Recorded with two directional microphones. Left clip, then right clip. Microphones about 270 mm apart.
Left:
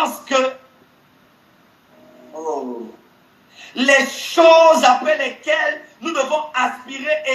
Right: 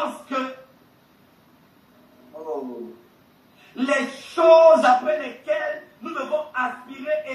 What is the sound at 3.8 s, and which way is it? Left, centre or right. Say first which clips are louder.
Speech: left 9 dB; left.